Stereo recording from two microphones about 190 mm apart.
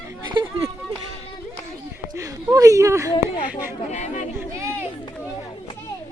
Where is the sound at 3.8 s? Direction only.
35° left (ahead or behind).